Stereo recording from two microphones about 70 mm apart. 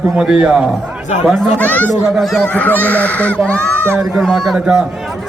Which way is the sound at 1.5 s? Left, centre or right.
Left.